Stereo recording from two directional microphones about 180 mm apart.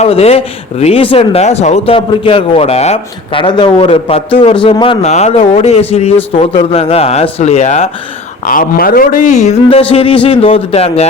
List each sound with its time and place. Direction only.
0.0 s speech: 35° left (ahead or behind)
8.4 s a man's voice: 50° left (ahead or behind); by 11.0 s 35° left (ahead or behind)